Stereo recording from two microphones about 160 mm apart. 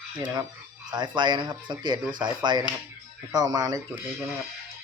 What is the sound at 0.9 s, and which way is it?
Speech, 25° right (ahead or behind).